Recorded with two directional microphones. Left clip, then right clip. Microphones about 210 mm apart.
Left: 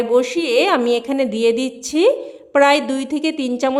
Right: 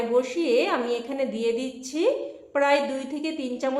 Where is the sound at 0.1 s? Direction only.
50° left (ahead or behind).